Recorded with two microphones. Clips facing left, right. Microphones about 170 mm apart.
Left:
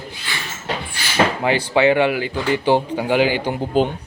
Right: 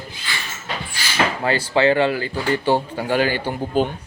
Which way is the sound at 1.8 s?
15° left (ahead or behind).